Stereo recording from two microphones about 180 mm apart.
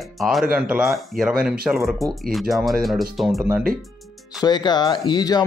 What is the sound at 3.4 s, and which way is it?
Speech, 15° right (ahead or behind).